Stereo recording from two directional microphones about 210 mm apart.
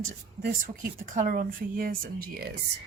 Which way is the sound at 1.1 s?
40° right (ahead or behind).